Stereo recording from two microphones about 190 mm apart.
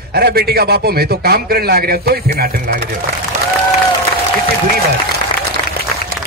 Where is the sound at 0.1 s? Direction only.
55° right (ahead or behind).